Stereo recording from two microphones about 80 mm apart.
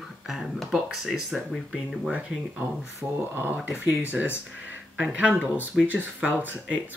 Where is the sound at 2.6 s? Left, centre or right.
Right.